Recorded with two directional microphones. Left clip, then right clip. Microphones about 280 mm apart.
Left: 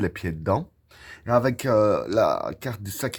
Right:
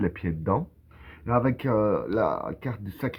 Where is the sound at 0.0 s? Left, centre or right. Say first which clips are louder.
Left 2 dB; left.